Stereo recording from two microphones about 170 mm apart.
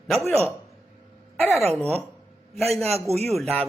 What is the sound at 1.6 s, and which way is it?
Speech, 5° left (ahead or behind).